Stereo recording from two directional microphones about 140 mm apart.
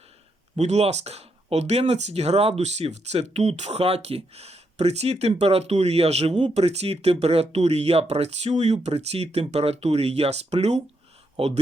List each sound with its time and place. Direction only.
0.5 s speech: 50° right (ahead or behind)